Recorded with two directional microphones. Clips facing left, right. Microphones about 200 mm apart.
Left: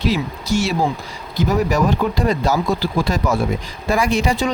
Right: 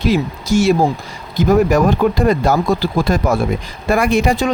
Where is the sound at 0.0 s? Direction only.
50° right (ahead or behind).